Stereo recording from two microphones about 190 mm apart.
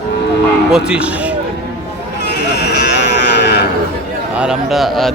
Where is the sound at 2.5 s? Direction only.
60° left (ahead or behind).